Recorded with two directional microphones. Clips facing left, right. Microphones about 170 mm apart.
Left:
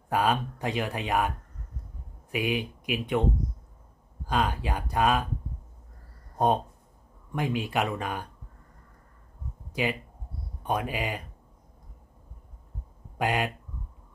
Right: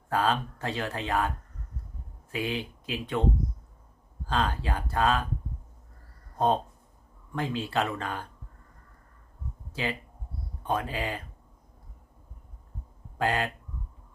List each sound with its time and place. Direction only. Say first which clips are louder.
0.1 s speech: left 1 dB; 15° left (ahead or behind)
2.3 s speech: left 3 dB; 15° left (ahead or behind)
4.3 s speech: left 1 dB; 15° left (ahead or behind)
6.3 s speech: left 1 dB; 15° left (ahead or behind)
9.7 s a sound: left 3 dB; 15° left (ahead or behind)
10.6 s speech: left 1 dB; 15° left (ahead or behind)
13.2 s speech: even; 15° left (ahead or behind)